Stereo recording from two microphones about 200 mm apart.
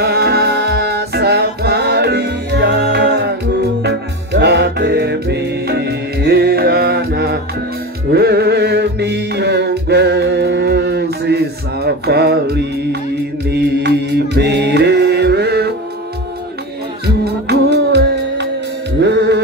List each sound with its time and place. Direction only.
0.0 s music: 55° right (ahead or behind)
13.5 s mantra: 60° right (ahead or behind)
17.0 s music: 55° right (ahead or behind)